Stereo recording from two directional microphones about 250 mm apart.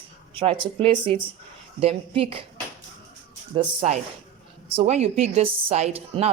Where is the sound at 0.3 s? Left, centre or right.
Right.